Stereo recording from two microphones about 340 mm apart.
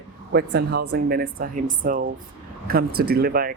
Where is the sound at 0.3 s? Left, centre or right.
Right.